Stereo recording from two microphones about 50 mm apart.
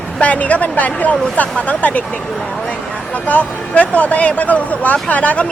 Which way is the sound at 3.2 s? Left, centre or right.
Left.